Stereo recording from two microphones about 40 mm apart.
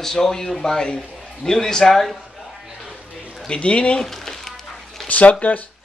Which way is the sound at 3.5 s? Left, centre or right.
Left.